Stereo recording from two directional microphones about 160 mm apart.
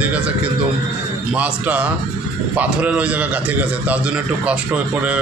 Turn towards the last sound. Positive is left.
turn(degrees=-10)  # may be behind; listen again after turning